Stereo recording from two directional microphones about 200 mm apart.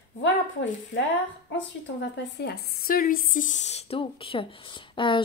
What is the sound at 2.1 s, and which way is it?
Speech, 55° left (ahead or behind).